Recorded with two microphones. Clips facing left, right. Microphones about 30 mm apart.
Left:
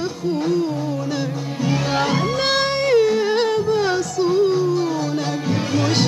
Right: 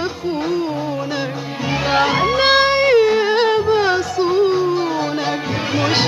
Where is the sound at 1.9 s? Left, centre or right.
Right.